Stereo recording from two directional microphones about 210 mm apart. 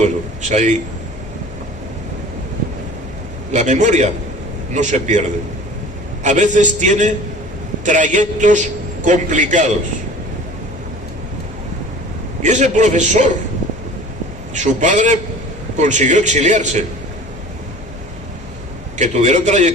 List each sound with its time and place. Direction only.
0.0 s a man's voice: 35° right (ahead or behind)
3.5 s a man's voice: 35° right (ahead or behind)
6.2 s a man's voice: 35° right (ahead or behind)
12.4 s a man's voice: 35° right (ahead or behind)
14.5 s a man's voice: 35° right (ahead or behind)
18.9 s a man's voice: 35° right (ahead or behind)